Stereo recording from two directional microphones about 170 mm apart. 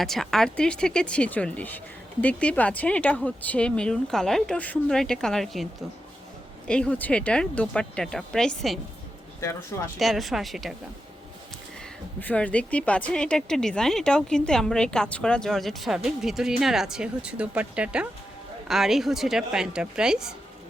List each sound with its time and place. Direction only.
0.0 s a woman's voice: centre (ahead or behind)
6.7 s a woman's voice: 5° left (ahead or behind)
9.4 s speech: 15° left (ahead or behind)
10.0 s a woman's voice: centre (ahead or behind)
12.2 s a woman's voice: 10° left (ahead or behind)